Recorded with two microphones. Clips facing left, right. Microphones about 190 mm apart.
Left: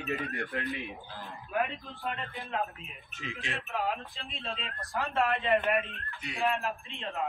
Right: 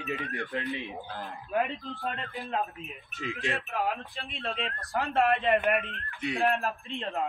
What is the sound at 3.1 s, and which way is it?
Speech, centre (ahead or behind).